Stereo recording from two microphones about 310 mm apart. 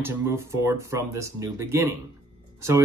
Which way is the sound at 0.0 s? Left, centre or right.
Centre.